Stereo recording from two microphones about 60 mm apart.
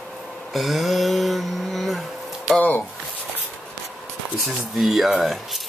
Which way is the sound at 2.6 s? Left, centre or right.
Left.